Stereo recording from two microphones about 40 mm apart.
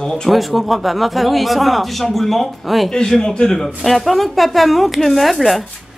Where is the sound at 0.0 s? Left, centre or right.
Centre.